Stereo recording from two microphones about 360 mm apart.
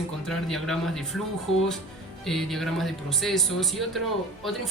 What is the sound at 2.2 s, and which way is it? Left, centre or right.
Speech, centre.